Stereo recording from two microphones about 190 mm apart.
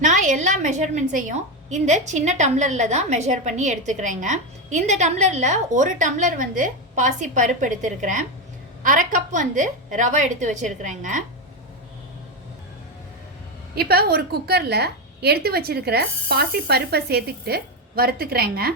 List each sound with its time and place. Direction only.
0.0 s a woman's voice: 40° right (ahead or behind)
13.7 s a woman's voice: 55° right (ahead or behind)